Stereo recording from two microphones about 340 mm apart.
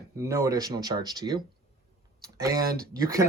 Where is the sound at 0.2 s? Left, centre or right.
Centre.